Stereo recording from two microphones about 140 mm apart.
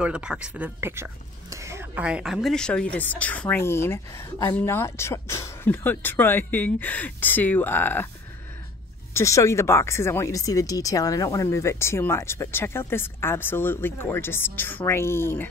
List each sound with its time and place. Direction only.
0.0 s speech: 5° right (ahead or behind)
0.7 s speech: 15° right (ahead or behind); by 8.1 s 15° left (ahead or behind)
9.1 s speech: 20° left (ahead or behind)